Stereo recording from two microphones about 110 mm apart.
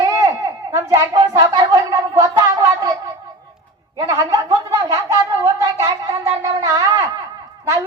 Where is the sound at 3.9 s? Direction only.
35° right (ahead or behind).